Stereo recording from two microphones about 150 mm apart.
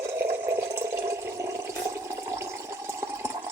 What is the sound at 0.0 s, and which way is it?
Water, 15° right (ahead or behind).